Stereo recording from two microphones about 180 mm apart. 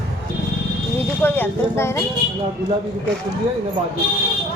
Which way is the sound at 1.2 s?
10° left (ahead or behind).